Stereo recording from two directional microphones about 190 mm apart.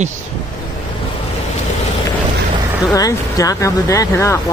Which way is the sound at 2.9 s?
20° left (ahead or behind).